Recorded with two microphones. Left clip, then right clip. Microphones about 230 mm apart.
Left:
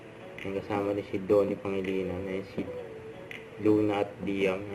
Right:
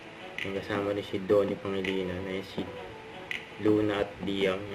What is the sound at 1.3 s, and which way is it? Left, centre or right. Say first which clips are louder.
Speech: even; right.